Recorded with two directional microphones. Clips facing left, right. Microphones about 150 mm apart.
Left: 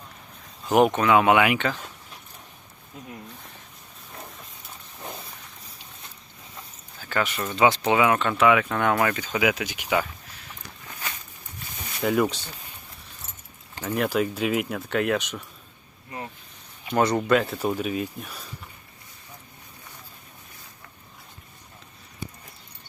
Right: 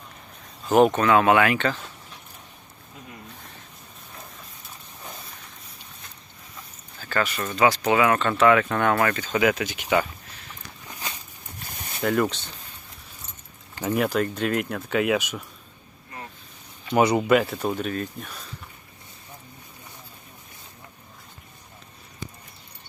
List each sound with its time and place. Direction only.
0.7 s speech: 15° left (ahead or behind)
7.0 s speech: 15° left (ahead or behind)
8.0 s speech: 15° left (ahead or behind)
10.8 s a sound: 20° right (ahead or behind)
11.9 s speech: 5° left (ahead or behind)
13.8 s speech: 10° right (ahead or behind)
14.1 s speech: 5° left (ahead or behind)
16.9 s speech: 10° right (ahead or behind); by 18.4 s 5° left (ahead or behind)